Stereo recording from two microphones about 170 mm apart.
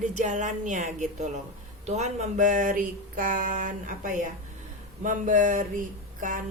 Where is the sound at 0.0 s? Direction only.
45° right (ahead or behind).